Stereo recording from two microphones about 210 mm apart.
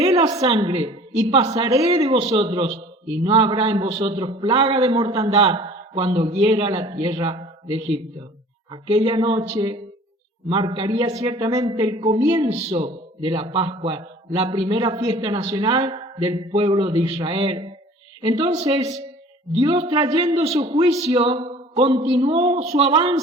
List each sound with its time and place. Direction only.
0.0 s a woman's voice: 20° right (ahead or behind)